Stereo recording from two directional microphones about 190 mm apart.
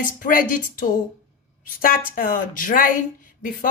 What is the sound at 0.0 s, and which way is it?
Speech, 45° left (ahead or behind).